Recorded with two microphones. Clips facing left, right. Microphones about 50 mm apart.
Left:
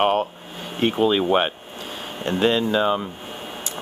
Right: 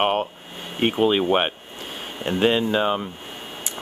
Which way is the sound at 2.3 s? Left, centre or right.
Centre.